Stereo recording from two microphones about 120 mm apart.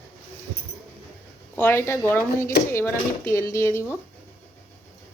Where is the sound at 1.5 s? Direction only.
20° left (ahead or behind).